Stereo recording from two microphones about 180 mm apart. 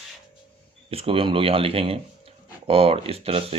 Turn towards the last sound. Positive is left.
turn(degrees=-30)  # may be behind; listen again after turning